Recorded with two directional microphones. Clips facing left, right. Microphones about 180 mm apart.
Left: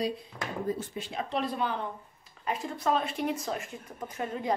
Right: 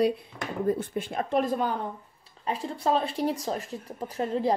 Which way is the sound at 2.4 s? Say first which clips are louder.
Right 2 dB; 30° right (ahead or behind).